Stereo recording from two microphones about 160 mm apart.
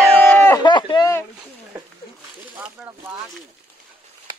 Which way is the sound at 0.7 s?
30° left (ahead or behind).